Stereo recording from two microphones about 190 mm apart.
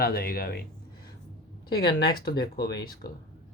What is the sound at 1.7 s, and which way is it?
Speech, 55° left (ahead or behind).